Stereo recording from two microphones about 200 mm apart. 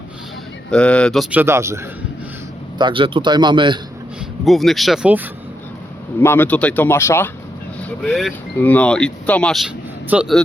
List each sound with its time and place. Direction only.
0.7 s speech: 5° left (ahead or behind); by 1.8 s 15° right (ahead or behind)
2.7 s a man's voice: 25° right (ahead or behind)
4.4 s speech: centre (ahead or behind)
6.1 s speech: 10° left (ahead or behind)